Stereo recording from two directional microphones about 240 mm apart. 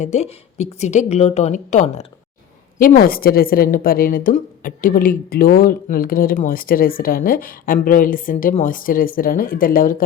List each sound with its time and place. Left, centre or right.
0.0 s a woman's voice: left